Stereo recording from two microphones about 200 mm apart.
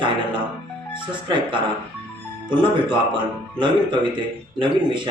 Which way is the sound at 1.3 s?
25° right (ahead or behind).